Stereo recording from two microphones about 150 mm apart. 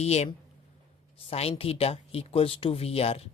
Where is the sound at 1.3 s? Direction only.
40° left (ahead or behind).